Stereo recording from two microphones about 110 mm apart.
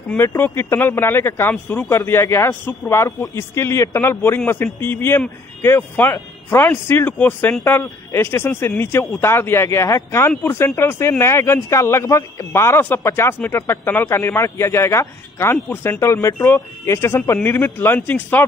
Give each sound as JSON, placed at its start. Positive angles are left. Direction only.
{"t": 0.4, "sound": "a man's voice", "side_deg": 20}